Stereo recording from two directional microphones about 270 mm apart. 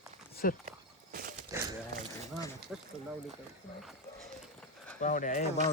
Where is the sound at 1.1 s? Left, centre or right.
Right.